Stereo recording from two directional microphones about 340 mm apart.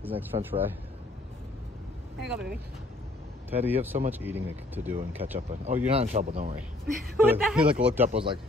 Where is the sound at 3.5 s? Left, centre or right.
Centre.